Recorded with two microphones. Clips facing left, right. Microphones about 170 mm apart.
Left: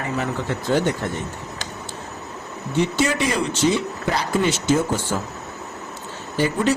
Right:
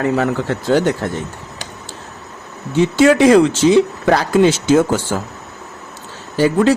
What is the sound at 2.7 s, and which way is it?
Speech, 90° right.